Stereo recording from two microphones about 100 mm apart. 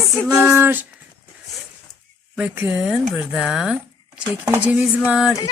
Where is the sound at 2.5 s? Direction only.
20° right (ahead or behind).